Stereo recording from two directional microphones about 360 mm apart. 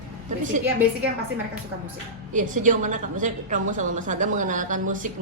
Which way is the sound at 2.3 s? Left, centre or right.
Right.